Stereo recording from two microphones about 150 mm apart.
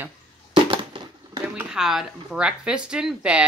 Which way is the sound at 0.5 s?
35° right (ahead or behind).